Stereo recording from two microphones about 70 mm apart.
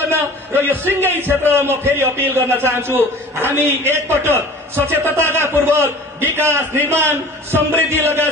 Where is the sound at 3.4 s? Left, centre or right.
Right.